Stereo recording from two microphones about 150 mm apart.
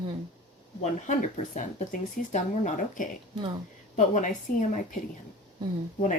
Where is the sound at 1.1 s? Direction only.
55° left (ahead or behind).